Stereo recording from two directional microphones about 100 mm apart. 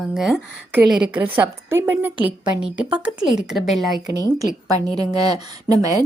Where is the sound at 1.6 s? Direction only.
25° right (ahead or behind); by 3.9 s centre (ahead or behind).